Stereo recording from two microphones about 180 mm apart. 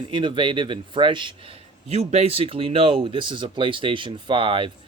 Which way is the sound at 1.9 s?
35° right (ahead or behind).